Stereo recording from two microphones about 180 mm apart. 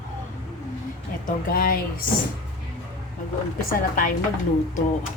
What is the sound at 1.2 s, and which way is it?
Speech, 55° left (ahead or behind).